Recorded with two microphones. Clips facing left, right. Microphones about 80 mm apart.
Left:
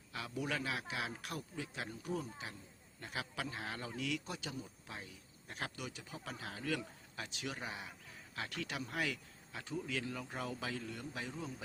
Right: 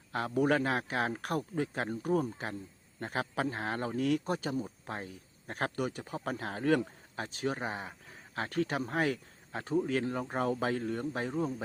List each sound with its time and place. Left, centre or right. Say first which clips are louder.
0.1 s a man's voice: right 12 dB; right